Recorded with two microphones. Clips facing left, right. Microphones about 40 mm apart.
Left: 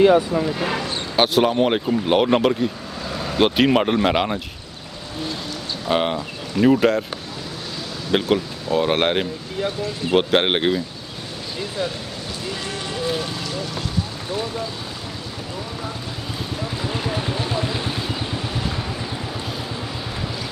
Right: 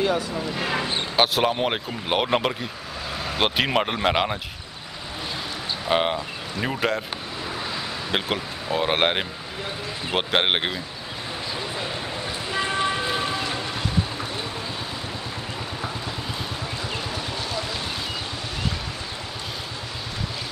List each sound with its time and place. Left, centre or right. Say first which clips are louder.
0.0 s speech: left 9 dB; left
1.1 s speech: left 4 dB; centre
5.9 s speech: left 2 dB; centre
8.1 s speech: left 8 dB; centre
12.5 s vehicle: right 8 dB; right
17.4 s vehicle: left 5 dB; left